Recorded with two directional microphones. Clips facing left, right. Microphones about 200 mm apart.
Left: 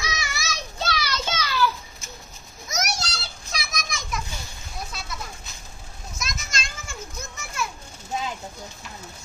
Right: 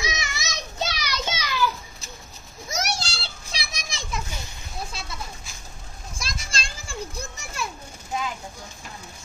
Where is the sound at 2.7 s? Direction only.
30° right (ahead or behind).